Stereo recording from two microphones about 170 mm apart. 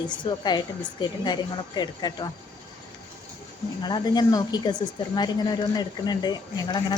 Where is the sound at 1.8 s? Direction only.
25° left (ahead or behind).